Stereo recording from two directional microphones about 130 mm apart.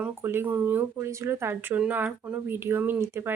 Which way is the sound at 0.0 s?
20° right (ahead or behind).